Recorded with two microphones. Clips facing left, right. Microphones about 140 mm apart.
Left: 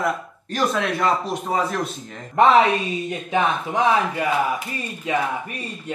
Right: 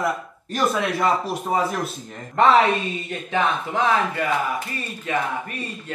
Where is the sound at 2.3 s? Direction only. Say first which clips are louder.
Left 1 dB; 15° left (ahead or behind).